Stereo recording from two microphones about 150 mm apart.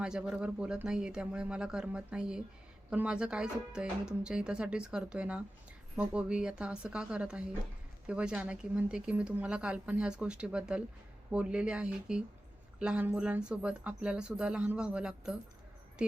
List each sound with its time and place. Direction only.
0.0 s speech: 5° right (ahead or behind)